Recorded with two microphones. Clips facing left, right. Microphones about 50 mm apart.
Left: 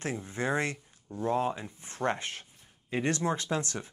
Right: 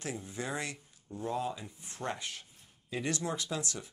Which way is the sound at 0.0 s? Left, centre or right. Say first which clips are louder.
Left 6 dB; left.